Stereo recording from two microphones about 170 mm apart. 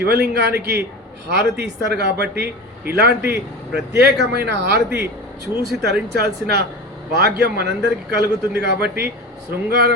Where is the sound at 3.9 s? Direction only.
75° right (ahead or behind).